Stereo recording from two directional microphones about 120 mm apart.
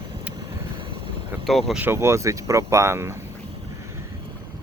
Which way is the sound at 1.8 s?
20° right (ahead or behind).